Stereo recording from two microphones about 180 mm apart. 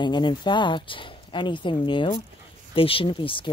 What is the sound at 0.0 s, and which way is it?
Speech, 25° left (ahead or behind).